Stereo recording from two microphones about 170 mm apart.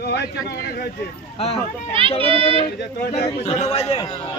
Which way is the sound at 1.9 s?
35° right (ahead or behind).